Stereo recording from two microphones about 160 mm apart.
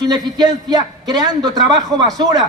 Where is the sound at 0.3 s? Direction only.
25° right (ahead or behind).